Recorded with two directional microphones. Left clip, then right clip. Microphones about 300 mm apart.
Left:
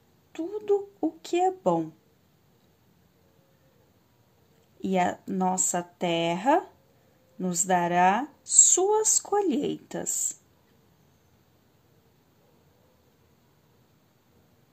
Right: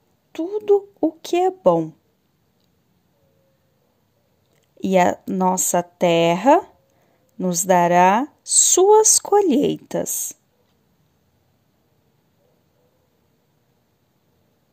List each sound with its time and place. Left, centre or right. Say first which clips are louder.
0.3 s speech: right 9 dB; right
4.7 s speech: right 9 dB; right